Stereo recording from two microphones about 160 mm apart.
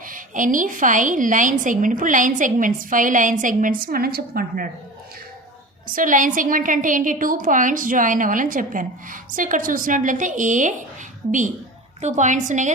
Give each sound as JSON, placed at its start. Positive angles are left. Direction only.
{"t": 0.1, "sound": "a woman's voice", "side_deg": -55}
{"t": 5.9, "sound": "a woman's voice", "side_deg": -55}